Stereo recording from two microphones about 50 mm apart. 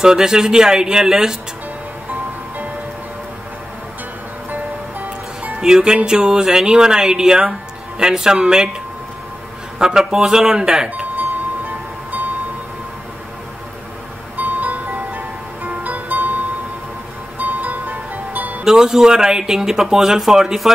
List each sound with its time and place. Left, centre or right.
0.0 s speech: centre
5.6 s speech: centre
9.8 s speech: centre
11.1 s music: right
14.3 s music: right
18.6 s speech: centre